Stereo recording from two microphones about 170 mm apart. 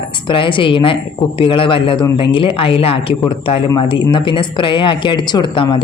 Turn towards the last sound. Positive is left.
turn(degrees=30)  # may be behind; listen again after turning